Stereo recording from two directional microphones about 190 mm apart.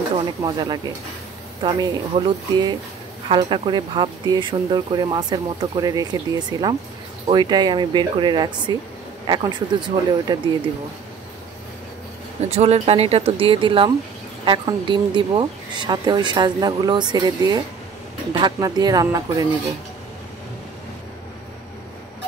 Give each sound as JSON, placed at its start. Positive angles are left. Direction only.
{"t": 0.4, "sound": "a woman's voice", "side_deg": -20}
{"t": 12.4, "sound": "a woman's voice", "side_deg": -35}